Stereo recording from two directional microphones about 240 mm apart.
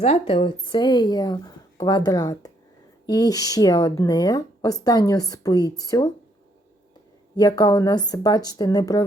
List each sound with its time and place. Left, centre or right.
0.0 s speech: left
7.3 s speech: centre